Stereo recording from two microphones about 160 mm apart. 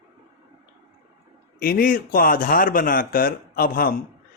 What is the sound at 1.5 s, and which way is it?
Speech, 65° left (ahead or behind).